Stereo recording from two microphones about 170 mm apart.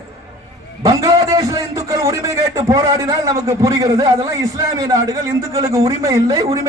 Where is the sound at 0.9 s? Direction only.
20° right (ahead or behind).